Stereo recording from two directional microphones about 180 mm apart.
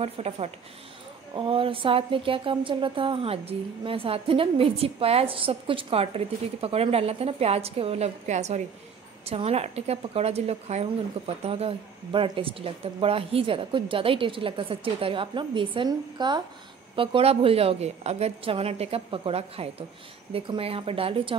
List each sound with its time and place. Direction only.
0.0 s speech: 35° right (ahead or behind)